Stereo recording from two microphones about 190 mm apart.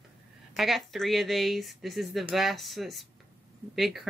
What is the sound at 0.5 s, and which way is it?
Speech, centre (ahead or behind).